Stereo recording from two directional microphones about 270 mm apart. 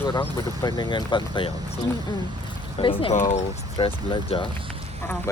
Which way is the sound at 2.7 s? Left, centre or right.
Centre.